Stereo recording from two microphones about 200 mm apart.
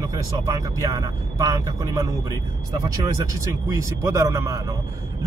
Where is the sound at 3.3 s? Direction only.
15° right (ahead or behind).